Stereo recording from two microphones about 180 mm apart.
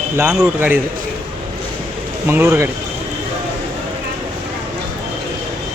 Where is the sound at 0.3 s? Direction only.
10° right (ahead or behind).